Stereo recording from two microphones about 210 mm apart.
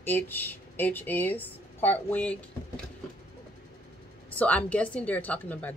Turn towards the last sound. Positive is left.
turn(degrees=5)  # may be behind; listen again after turning